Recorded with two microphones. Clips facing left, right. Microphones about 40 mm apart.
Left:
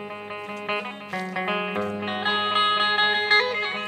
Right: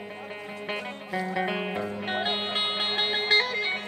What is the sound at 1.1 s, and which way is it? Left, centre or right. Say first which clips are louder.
Music: right 2 dB; left.